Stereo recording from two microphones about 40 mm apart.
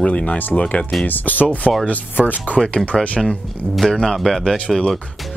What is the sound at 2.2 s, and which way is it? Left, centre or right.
Speech, centre.